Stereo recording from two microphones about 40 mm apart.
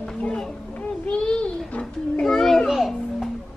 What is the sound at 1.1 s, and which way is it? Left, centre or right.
Child singing, left.